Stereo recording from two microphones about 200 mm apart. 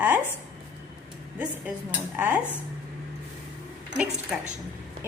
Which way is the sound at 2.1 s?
10° right (ahead or behind).